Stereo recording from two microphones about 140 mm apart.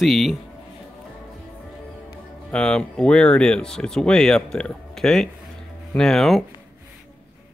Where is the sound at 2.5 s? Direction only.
5° left (ahead or behind).